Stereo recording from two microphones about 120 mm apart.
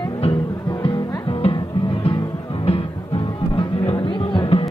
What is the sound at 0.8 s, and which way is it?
Music, 50° left (ahead or behind).